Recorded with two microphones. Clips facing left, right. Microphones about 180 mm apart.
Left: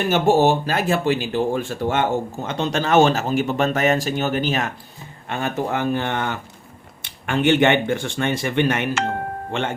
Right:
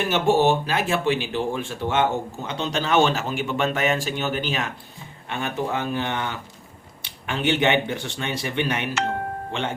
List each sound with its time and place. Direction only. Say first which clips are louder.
0.1 s speech: left 3 dB; 40° left (ahead or behind)